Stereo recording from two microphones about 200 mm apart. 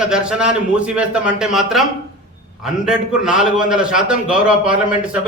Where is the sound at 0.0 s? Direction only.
5° right (ahead or behind).